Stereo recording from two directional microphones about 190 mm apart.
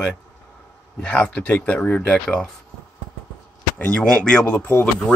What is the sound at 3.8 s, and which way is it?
Speech, 5° left (ahead or behind).